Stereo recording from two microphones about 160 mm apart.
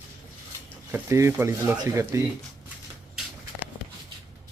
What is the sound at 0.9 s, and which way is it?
Speech, 15° right (ahead or behind).